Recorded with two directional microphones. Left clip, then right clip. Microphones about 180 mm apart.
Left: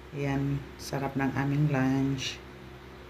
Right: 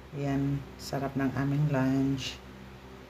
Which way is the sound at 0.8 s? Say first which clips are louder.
Left 1 dB; 5° right (ahead or behind).